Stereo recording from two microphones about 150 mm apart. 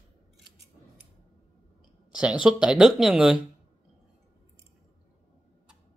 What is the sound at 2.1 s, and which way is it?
Speech, 5° right (ahead or behind).